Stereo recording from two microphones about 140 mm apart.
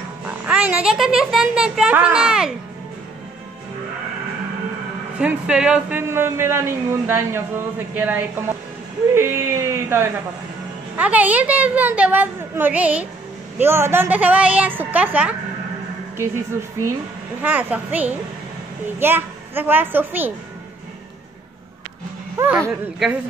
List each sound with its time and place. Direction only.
0.3 s speech: 10° right (ahead or behind)
5.2 s a man's voice: 5° right (ahead or behind)
22.4 s a man's voice: 15° right (ahead or behind)